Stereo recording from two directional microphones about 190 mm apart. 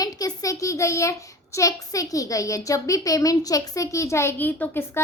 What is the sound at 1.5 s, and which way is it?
A child's voice, 15° left (ahead or behind).